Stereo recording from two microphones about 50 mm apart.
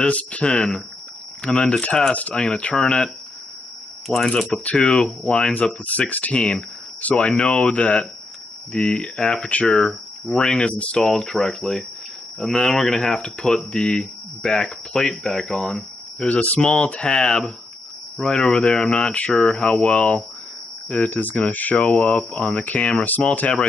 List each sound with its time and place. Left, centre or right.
0.1 s speech: left
4.3 s speech: left
5.9 s speech: left
11.1 s speech: centre
16.3 s speech: left
23.0 s speech: left